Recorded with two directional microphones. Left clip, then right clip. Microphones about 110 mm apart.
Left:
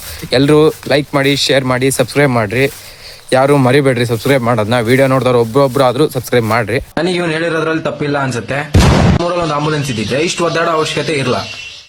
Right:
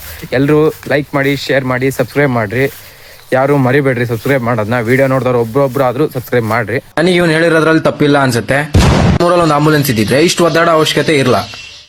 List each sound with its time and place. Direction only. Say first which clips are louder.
0.3 s speech: left 1 dB; 15° left (ahead or behind)
7.0 s speech: right 7 dB; 45° right (ahead or behind)
8.7 s gunshot: even; centre (ahead or behind)
9.4 s speech: right 5 dB; 50° right (ahead or behind)